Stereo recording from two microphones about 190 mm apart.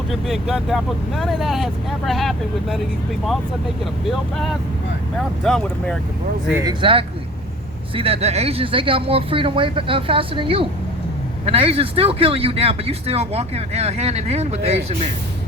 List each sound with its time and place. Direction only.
0.1 s speech: centre (ahead or behind)
4.0 s speech: centre (ahead or behind)
6.5 s speech: 15° right (ahead or behind)
7.9 s speech: 30° right (ahead or behind)